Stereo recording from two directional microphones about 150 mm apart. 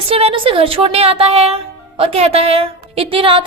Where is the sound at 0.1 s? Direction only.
40° right (ahead or behind).